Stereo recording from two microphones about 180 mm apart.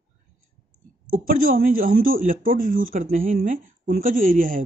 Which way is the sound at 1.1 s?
50° right (ahead or behind).